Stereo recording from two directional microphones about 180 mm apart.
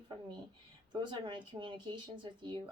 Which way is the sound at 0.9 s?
25° right (ahead or behind).